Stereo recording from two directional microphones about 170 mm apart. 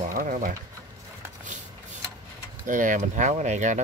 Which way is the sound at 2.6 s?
50° right (ahead or behind).